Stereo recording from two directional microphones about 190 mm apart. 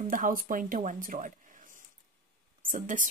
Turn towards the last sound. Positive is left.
turn(degrees=-45)  # may be behind; listen again after turning